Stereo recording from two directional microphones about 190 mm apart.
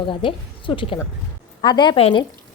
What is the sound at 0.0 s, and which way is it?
A woman's voice, 25° left (ahead or behind).